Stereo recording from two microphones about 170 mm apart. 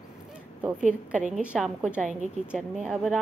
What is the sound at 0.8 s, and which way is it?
Speech, 45° right (ahead or behind).